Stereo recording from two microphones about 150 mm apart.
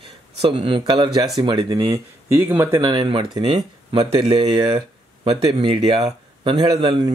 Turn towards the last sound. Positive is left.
turn(degrees=-30)  # may be behind; listen again after turning